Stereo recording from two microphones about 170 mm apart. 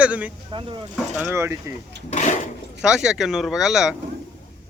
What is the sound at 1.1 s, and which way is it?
Speech, 15° right (ahead or behind).